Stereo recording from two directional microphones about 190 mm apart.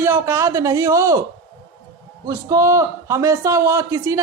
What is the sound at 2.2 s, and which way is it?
A man's voice, 20° right (ahead or behind).